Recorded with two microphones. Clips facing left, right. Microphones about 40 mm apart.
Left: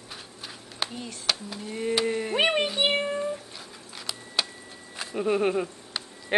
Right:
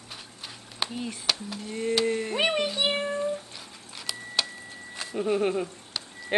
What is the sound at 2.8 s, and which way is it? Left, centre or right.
Music, left.